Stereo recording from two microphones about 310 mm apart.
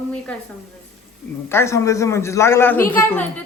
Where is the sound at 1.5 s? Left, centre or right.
Centre.